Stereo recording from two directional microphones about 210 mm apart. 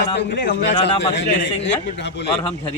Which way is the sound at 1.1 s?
55° left (ahead or behind).